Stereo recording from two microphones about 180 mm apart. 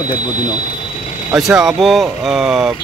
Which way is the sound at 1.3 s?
5° right (ahead or behind).